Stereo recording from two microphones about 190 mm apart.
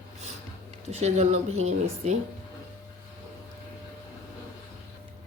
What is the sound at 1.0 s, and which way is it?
Speech, 35° right (ahead or behind).